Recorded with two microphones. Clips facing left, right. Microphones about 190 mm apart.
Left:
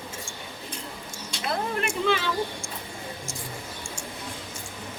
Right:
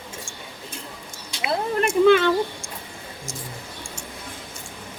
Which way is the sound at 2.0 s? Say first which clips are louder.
Right 11 dB; 60° right (ahead or behind).